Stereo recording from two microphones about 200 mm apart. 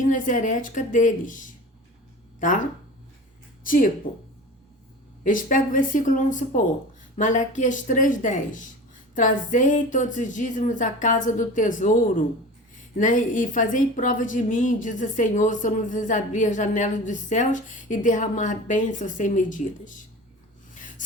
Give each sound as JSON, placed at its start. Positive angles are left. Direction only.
{"t": 0.0, "sound": "a woman's voice", "side_deg": 40}
{"t": 2.4, "sound": "a woman's voice", "side_deg": 40}
{"t": 3.6, "sound": "speech", "side_deg": 45}
{"t": 5.2, "sound": "a woman's voice", "side_deg": 40}